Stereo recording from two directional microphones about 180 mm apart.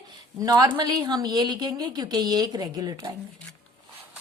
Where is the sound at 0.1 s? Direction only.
20° right (ahead or behind).